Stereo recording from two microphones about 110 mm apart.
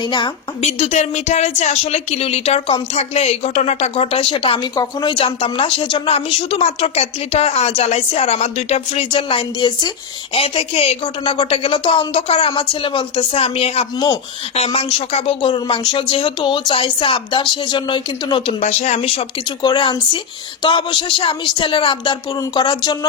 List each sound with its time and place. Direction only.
0.0 s a woman's voice: 45° left (ahead or behind)
0.6 s a woman's voice: 85° left; by 4.7 s 55° left (ahead or behind)
4.7 s a woman's voice: 40° left (ahead or behind)
10.3 s a woman's voice: 55° left (ahead or behind)
11.0 s a woman's voice: 50° left (ahead or behind)
13.3 s a woman's voice: 65° left (ahead or behind); by 18.5 s 50° left (ahead or behind)
18.6 s speech: 85° left; by 19.2 s 65° left (ahead or behind)
19.6 s a woman's voice: 45° left (ahead or behind)